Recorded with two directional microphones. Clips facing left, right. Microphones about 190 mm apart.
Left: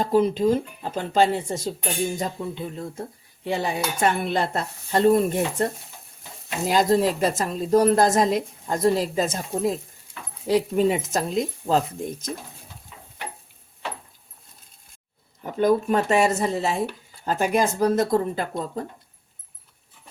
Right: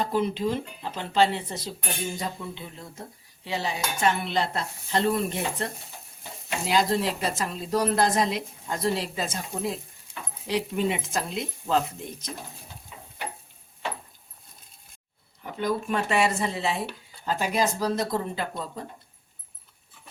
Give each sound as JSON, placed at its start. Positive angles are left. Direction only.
{"t": 0.0, "sound": "a woman's voice", "side_deg": 40}
{"t": 15.4, "sound": "a woman's voice", "side_deg": 45}